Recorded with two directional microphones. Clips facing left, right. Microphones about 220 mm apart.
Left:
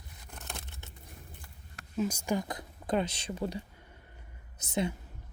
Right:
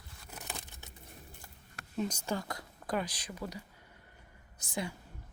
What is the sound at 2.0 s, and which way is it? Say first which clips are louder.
Speech: left 4 dB; 10° left (ahead or behind).